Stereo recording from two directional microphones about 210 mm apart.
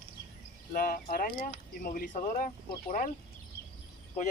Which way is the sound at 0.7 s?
40° left (ahead or behind).